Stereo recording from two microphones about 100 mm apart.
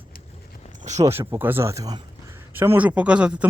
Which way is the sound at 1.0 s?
25° right (ahead or behind).